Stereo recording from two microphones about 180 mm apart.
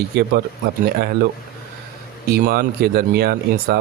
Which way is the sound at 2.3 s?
55° right (ahead or behind).